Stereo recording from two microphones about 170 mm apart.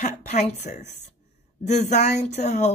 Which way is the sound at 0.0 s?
45° left (ahead or behind).